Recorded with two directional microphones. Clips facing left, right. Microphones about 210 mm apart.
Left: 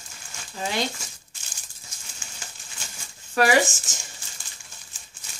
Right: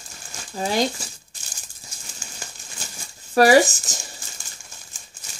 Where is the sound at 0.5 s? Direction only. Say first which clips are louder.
Right 6 dB; 40° right (ahead or behind).